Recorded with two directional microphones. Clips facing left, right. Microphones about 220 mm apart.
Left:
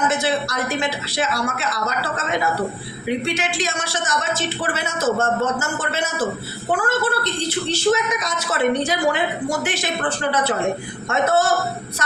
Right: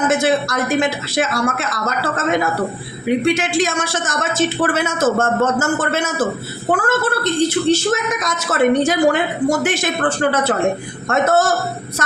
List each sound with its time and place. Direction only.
0.1 s a woman's voice: 50° right (ahead or behind)